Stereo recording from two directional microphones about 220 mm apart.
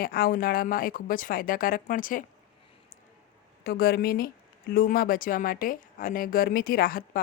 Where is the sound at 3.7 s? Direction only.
40° left (ahead or behind).